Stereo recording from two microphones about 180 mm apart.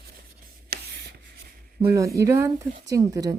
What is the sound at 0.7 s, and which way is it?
Writing, 65° right (ahead or behind).